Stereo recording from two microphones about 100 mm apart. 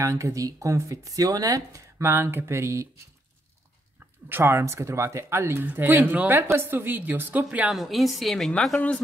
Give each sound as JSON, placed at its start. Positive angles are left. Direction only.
{"t": 0.0, "sound": "speech", "side_deg": -30}
{"t": 4.3, "sound": "a woman's voice", "side_deg": -25}
{"t": 7.6, "sound": "a woman's voice", "side_deg": 0}